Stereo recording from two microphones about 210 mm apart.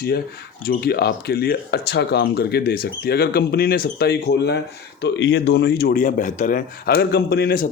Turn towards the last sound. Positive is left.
turn(degrees=45)  # may be behind; listen again after turning